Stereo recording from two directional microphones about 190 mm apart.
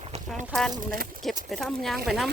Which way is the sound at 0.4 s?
Centre (ahead or behind).